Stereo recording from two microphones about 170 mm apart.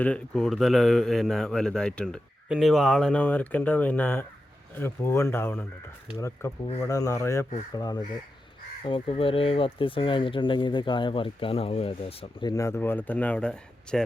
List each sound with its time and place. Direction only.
0.0 s a man's voice: 5° left (ahead or behind)